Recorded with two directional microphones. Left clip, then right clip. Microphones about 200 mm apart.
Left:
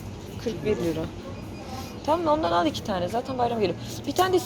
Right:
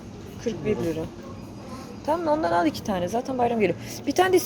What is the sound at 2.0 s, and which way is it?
Speech, 15° right (ahead or behind).